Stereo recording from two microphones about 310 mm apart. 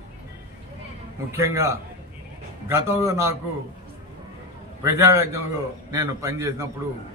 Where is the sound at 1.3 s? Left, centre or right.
Centre.